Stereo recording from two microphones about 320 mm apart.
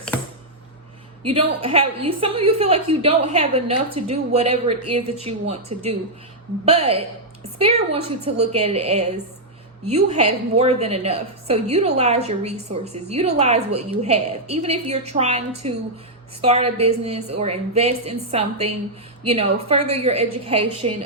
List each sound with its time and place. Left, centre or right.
1.2 s a woman's voice: centre